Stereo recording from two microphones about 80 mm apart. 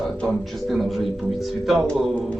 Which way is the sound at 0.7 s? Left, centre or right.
Centre.